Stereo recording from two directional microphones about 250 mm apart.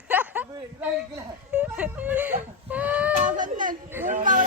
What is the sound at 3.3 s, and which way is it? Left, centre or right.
Baby cry, right.